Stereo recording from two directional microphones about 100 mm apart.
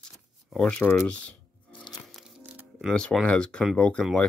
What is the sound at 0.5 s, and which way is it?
Speech, 5° left (ahead or behind).